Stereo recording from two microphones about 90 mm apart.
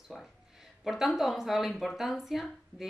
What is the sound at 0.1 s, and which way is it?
A woman's voice, 5° left (ahead or behind).